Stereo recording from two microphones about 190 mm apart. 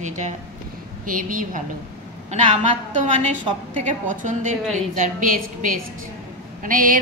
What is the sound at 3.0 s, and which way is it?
A woman's voice, 40° right (ahead or behind).